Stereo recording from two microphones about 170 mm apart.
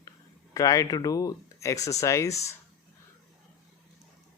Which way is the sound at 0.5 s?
20° left (ahead or behind).